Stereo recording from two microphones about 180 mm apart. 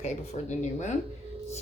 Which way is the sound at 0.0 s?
40° left (ahead or behind).